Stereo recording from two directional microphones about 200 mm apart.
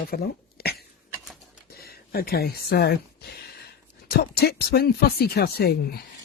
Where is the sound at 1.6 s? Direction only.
50° left (ahead or behind).